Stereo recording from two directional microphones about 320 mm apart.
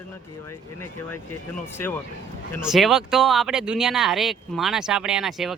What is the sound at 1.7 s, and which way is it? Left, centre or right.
Speech, centre.